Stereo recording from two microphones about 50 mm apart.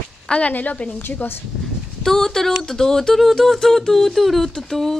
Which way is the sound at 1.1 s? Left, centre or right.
Left.